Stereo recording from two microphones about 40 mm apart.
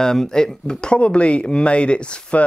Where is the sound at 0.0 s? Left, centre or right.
Centre.